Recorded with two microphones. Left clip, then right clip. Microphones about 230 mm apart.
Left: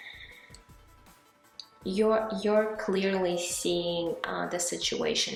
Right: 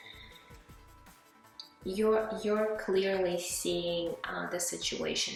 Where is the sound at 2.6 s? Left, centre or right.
Centre.